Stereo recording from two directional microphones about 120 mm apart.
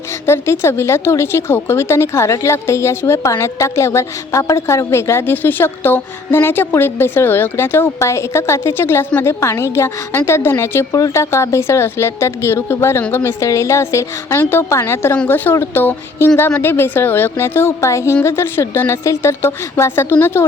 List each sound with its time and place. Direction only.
0.3 s a woman's voice: 20° left (ahead or behind)